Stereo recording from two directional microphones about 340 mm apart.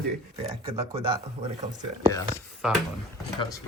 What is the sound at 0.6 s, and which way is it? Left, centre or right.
Speech, centre.